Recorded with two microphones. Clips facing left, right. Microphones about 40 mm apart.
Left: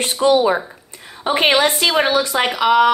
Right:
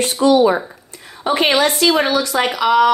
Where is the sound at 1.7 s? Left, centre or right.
Centre.